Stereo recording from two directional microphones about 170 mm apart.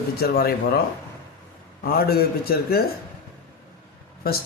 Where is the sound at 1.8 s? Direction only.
65° left (ahead or behind).